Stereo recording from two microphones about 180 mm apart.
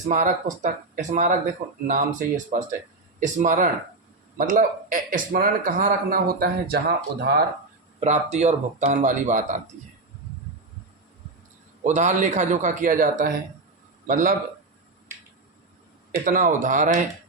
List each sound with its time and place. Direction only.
0.1 s speech: 45° right (ahead or behind); by 7.4 s 60° right (ahead or behind)
7.9 s speech: 40° right (ahead or behind)
11.8 s speech: 40° right (ahead or behind)
16.2 s speech: 50° right (ahead or behind)